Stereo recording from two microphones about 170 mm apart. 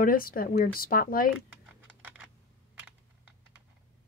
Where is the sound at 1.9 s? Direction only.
10° right (ahead or behind).